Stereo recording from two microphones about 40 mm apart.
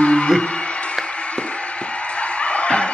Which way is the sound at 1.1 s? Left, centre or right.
Left.